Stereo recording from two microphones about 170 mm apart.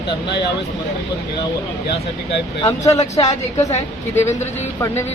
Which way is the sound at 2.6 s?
20° left (ahead or behind).